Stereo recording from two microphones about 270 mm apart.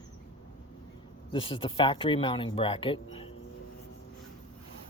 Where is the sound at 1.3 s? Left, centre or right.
Centre.